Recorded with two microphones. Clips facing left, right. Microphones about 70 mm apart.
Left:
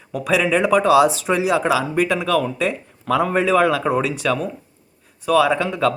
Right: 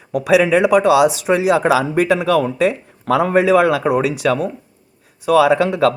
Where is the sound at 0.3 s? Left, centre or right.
Centre.